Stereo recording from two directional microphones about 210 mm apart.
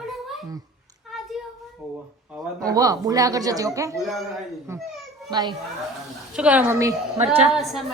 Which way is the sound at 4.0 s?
Centre (ahead or behind).